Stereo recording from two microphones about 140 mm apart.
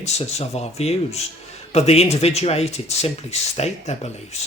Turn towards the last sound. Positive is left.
turn(degrees=50)  # may be behind; listen again after turning